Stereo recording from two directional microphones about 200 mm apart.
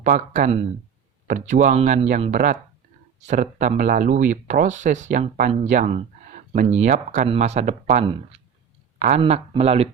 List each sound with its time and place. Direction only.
0.0 s speech: 40° right (ahead or behind)